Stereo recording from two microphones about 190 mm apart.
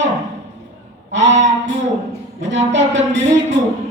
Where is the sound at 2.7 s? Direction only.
70° right (ahead or behind).